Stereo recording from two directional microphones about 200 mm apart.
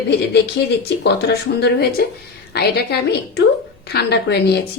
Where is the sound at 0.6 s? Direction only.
55° left (ahead or behind).